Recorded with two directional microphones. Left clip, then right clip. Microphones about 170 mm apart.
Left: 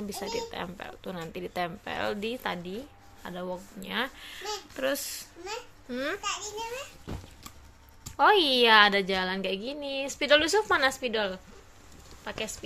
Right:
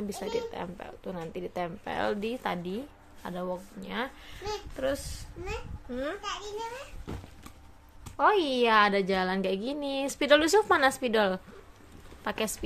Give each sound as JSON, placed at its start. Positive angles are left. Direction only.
{"t": 0.1, "sound": "a woman's voice", "side_deg": 0}
{"t": 5.9, "sound": "a child's voice", "side_deg": 20}
{"t": 8.0, "sound": "a woman's voice", "side_deg": 5}